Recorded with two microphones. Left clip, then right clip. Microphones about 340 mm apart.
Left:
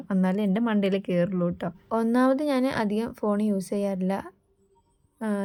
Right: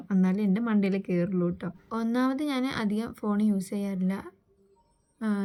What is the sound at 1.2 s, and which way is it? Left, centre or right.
Speech, left.